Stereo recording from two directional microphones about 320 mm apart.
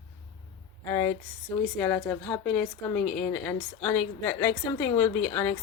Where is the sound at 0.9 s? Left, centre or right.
Centre.